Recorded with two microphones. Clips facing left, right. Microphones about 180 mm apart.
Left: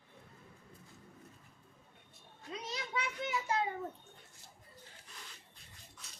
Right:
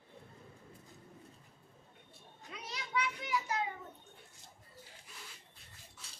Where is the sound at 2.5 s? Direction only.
25° left (ahead or behind).